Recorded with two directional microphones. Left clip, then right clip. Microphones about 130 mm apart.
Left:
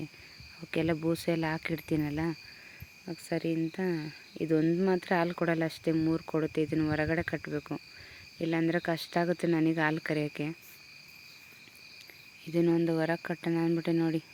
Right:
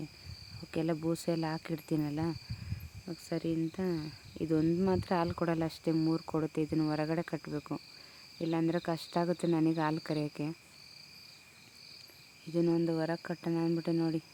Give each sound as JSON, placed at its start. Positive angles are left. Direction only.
{"t": 0.7, "sound": "cricket", "side_deg": 10}
{"t": 3.2, "sound": "speech", "side_deg": 5}
{"t": 8.4, "sound": "cricket", "side_deg": 5}
{"t": 12.5, "sound": "cricket", "side_deg": 15}